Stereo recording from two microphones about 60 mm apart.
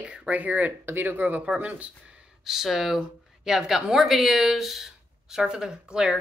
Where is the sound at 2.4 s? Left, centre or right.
Centre.